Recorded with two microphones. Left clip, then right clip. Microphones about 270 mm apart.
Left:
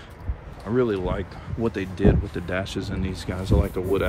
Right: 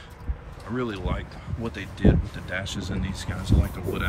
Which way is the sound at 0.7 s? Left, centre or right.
Centre.